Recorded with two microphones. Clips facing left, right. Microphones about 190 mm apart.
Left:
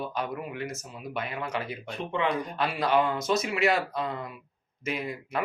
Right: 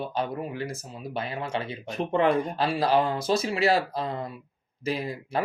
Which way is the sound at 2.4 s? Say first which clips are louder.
Right 3 dB; 30° right (ahead or behind).